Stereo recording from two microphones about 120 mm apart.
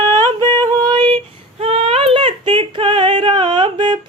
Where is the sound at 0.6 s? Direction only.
35° right (ahead or behind).